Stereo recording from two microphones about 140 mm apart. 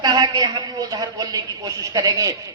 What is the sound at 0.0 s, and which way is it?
A woman's voice, 30° right (ahead or behind).